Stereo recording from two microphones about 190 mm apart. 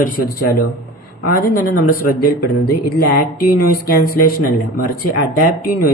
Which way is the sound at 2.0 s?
50° left (ahead or behind).